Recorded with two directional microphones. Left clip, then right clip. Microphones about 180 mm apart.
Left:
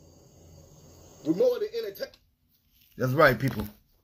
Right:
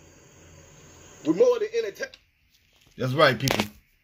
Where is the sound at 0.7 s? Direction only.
Centre (ahead or behind).